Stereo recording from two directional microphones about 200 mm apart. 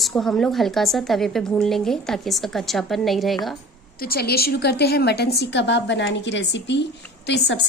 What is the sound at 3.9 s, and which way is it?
A woman's voice, 50° left (ahead or behind).